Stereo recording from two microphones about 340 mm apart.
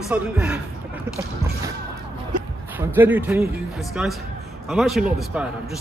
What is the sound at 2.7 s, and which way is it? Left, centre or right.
Speech, centre.